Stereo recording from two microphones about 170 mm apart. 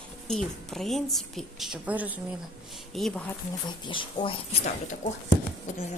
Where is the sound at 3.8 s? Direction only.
30° left (ahead or behind).